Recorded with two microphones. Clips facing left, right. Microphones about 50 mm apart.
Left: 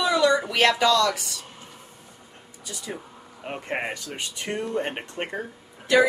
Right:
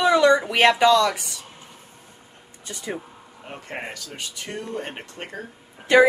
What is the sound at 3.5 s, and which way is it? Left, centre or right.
Speech, left.